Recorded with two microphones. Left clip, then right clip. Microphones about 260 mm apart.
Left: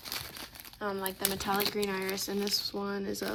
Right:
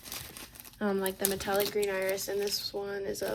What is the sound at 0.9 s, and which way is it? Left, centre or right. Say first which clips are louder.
Speech: right 4 dB; centre.